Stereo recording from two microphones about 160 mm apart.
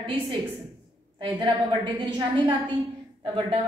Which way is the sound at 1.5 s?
30° right (ahead or behind).